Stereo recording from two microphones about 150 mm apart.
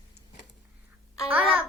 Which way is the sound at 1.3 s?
10° right (ahead or behind).